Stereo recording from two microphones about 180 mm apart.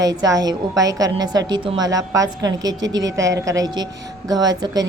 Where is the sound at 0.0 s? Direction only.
20° right (ahead or behind).